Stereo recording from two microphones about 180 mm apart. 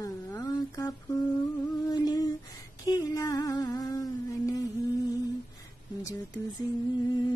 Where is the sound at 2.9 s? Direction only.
20° left (ahead or behind).